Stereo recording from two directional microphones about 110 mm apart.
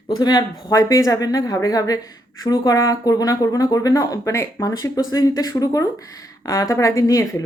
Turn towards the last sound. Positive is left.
turn(degrees=30)  # may be behind; listen again after turning